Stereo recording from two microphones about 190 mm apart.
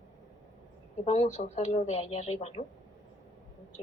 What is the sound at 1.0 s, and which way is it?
A woman's voice, 35° left (ahead or behind).